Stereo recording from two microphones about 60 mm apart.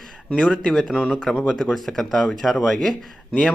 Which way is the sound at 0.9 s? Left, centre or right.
Centre.